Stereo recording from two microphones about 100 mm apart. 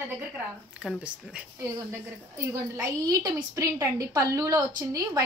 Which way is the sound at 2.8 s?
35° right (ahead or behind).